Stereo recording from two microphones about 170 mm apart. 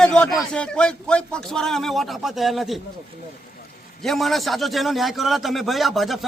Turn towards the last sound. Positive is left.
turn(degrees=0)  # may be behind; listen again after turning